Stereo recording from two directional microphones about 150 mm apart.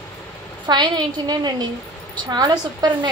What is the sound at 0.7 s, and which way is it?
Speech, 30° right (ahead or behind).